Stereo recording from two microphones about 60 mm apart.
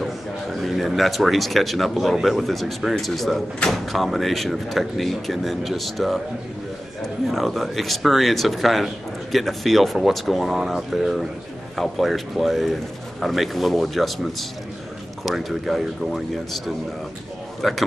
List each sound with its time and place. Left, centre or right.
0.0 s speech: centre
7.2 s speech: centre
15.2 s a man's voice: centre